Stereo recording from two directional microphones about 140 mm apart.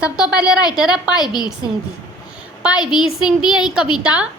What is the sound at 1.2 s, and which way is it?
Speech, 30° left (ahead or behind).